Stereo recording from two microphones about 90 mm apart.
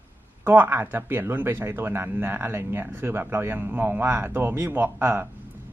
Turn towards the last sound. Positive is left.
turn(degrees=-25)  # may be behind; listen again after turning